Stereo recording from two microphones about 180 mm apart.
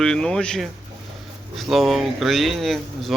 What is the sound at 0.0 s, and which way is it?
Speech, 5° left (ahead or behind).